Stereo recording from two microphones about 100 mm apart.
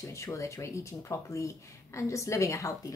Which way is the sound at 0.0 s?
30° left (ahead or behind).